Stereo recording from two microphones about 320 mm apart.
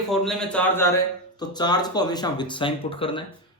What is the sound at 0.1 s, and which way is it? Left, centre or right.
A man's voice, centre.